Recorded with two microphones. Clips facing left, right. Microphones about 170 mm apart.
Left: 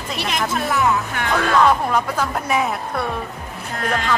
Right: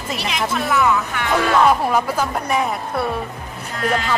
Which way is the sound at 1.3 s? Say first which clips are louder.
Right 1 dB; 10° right (ahead or behind).